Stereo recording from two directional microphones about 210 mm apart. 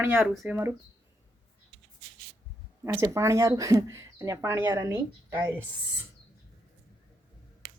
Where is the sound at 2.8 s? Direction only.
15° right (ahead or behind).